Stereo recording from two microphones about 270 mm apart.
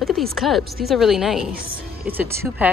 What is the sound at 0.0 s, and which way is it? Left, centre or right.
Speech, centre.